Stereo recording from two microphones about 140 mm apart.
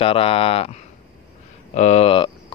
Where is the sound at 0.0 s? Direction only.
40° left (ahead or behind).